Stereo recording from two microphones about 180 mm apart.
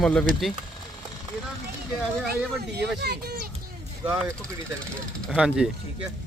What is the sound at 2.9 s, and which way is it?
Speech, 65° right (ahead or behind).